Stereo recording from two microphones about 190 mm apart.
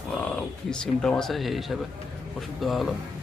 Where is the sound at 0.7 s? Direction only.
5° left (ahead or behind).